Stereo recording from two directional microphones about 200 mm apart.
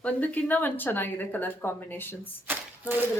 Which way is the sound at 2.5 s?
10° right (ahead or behind).